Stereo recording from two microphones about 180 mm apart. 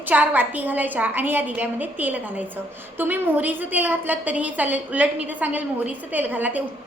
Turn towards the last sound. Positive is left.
turn(degrees=-10)  # may be behind; listen again after turning